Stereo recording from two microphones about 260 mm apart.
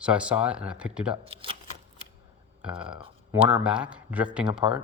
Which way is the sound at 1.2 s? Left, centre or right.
Right.